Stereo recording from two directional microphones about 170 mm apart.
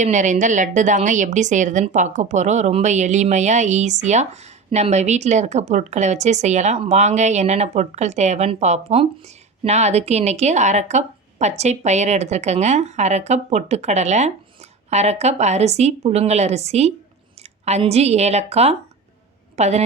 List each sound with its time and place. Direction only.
0.0 s a woman's voice: 45° right (ahead or behind)